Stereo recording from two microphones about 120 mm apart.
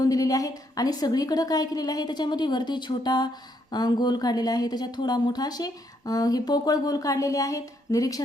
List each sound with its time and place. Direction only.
0.0 s speech: 30° left (ahead or behind)